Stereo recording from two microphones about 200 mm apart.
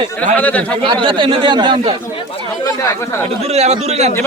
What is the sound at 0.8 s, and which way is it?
A man's voice, 25° right (ahead or behind).